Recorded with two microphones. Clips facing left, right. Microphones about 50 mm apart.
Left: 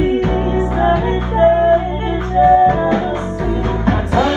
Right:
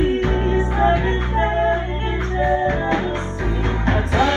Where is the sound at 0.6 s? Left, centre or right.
Left.